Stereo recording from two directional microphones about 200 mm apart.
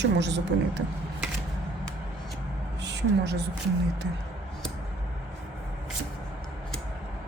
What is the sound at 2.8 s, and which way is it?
Speech, 60° right (ahead or behind).